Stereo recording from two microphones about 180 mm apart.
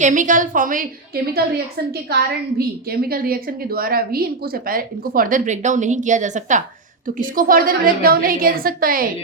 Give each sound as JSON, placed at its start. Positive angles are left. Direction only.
{"t": 0.0, "sound": "a woman's voice", "side_deg": -45}